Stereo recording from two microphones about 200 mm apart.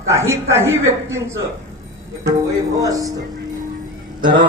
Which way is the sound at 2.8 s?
15° right (ahead or behind).